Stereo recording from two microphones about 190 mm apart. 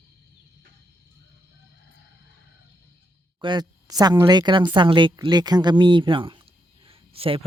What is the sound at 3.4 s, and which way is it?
A woman's voice, 25° right (ahead or behind).